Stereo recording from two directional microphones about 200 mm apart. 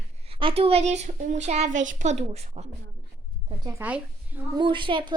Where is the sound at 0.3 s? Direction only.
25° right (ahead or behind).